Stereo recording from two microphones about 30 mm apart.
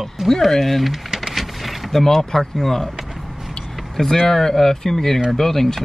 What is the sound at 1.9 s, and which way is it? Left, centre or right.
Speech, centre.